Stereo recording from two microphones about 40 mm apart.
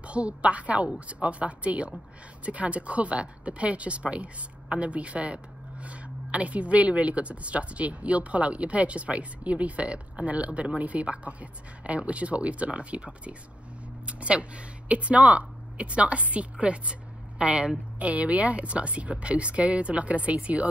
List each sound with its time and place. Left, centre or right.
0.0 s a woman's voice: right
17.9 s speech: right